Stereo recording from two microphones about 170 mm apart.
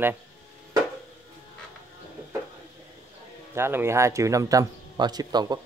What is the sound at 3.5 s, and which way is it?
A man's voice, 15° right (ahead or behind).